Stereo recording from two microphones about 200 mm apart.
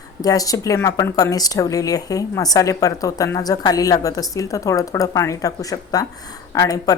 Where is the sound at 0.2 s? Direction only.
20° left (ahead or behind).